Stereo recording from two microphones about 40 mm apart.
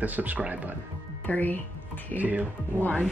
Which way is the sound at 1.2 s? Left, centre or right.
Left.